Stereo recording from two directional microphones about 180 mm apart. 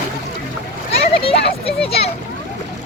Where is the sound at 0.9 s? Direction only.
35° left (ahead or behind).